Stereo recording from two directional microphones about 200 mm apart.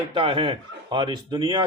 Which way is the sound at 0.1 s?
25° right (ahead or behind).